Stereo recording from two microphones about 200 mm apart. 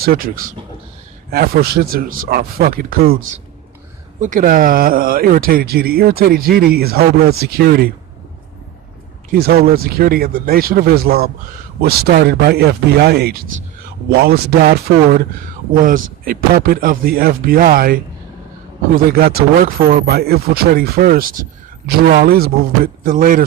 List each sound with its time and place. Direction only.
0.0 s speech: 45° right (ahead or behind)
9.3 s speech: 50° right (ahead or behind)